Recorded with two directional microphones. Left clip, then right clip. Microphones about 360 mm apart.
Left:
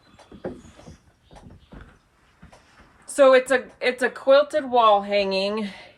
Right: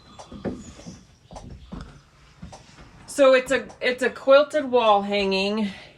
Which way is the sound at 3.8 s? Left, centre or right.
Centre.